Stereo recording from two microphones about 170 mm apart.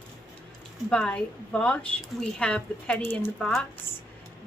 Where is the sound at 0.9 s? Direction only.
5° left (ahead or behind).